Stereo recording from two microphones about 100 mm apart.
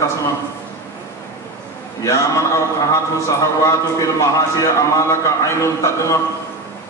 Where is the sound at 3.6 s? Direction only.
30° left (ahead or behind).